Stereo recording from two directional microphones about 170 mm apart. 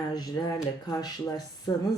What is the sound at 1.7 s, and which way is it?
Music, 20° left (ahead or behind).